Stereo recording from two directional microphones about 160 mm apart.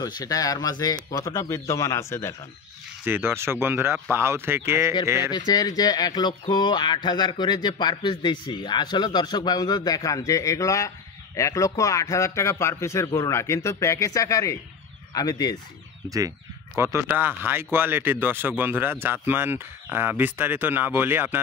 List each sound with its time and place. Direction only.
0.0 s speech: 20° left (ahead or behind)
3.1 s speech: 15° right (ahead or behind)
5.5 s speech: 25° left (ahead or behind)
16.7 s speech: 15° right (ahead or behind)